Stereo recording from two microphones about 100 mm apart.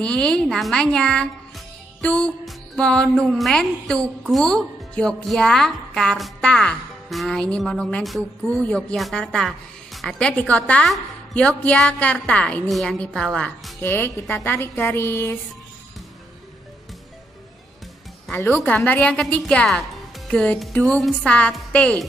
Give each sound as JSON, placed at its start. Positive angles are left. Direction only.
{"t": 0.0, "sound": "a woman's voice", "side_deg": 10}
{"t": 2.0, "sound": "music", "side_deg": 10}
{"t": 2.4, "sound": "a woman's voice", "side_deg": 5}
{"t": 12.6, "sound": "a woman's voice", "side_deg": 0}
{"t": 13.7, "sound": "a woman's voice", "side_deg": 20}
{"t": 18.3, "sound": "speech", "side_deg": 20}
{"t": 18.7, "sound": "a woman's voice", "side_deg": 10}